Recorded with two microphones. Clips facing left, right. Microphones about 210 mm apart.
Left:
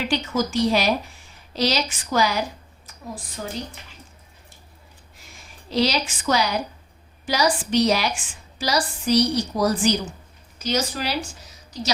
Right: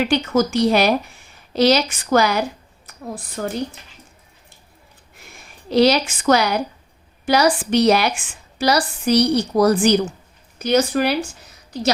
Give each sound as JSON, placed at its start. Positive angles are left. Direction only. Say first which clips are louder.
{"t": 0.0, "sound": "a woman's voice", "louder": "right 6 dB", "side_deg": -60}
{"t": 5.7, "sound": "a woman's voice", "louder": "right 7 dB", "side_deg": -60}